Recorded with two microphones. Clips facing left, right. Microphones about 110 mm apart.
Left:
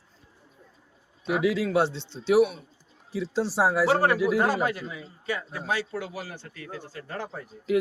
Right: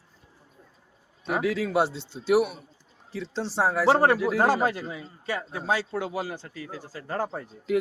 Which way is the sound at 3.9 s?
30° right (ahead or behind).